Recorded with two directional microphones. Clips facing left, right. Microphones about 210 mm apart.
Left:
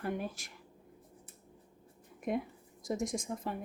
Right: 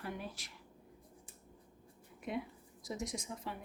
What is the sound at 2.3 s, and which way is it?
A woman's voice, 45° left (ahead or behind).